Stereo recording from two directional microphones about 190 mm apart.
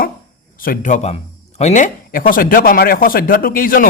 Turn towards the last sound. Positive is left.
turn(degrees=50)  # may be behind; listen again after turning